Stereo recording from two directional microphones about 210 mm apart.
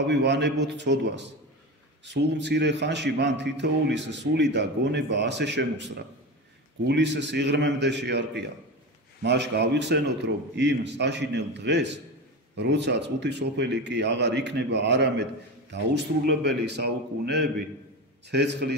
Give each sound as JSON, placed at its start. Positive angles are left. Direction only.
{"t": 0.0, "sound": "a man's voice", "side_deg": -55}
{"t": 6.9, "sound": "a man's voice", "side_deg": -55}